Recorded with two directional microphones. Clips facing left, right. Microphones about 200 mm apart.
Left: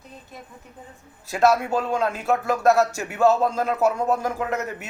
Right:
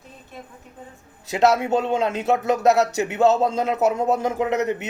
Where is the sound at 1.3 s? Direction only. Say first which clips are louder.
Right 1 dB; 20° right (ahead or behind).